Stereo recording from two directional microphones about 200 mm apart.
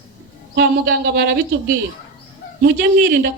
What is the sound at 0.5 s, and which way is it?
A man's voice, 50° right (ahead or behind).